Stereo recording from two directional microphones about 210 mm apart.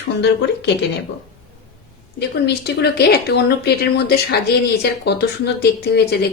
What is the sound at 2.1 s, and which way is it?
A woman's voice, 50° left (ahead or behind).